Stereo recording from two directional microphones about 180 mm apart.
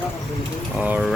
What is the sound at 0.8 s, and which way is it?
Speech, 5° right (ahead or behind).